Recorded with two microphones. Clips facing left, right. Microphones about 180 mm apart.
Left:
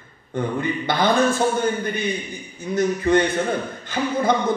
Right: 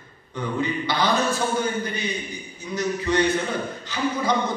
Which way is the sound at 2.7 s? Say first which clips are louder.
Left 5 dB; 50° left (ahead or behind).